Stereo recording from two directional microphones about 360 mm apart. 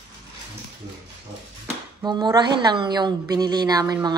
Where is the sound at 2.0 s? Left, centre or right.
Centre.